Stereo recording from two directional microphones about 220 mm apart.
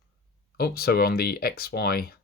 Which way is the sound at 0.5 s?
45° left (ahead or behind).